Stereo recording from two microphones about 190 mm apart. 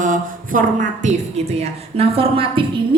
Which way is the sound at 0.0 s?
45° right (ahead or behind).